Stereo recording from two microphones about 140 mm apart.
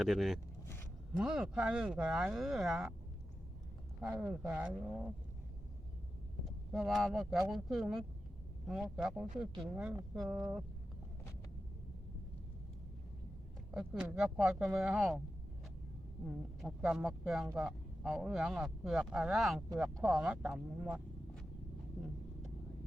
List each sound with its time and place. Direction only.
0.0 s speech: centre (ahead or behind)
0.6 s a sound: 15° left (ahead or behind)
1.1 s speech: 5° right (ahead or behind)
4.0 s speech: 5° right (ahead or behind)
6.4 s speech: centre (ahead or behind)
13.7 s speech: 5° right (ahead or behind)
16.2 s speech: centre (ahead or behind)